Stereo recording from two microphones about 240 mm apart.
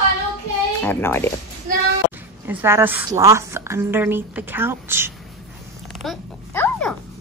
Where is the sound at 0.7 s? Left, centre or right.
Centre.